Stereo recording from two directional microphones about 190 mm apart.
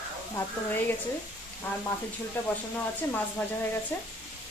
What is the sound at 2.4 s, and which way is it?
Speech, 10° left (ahead or behind).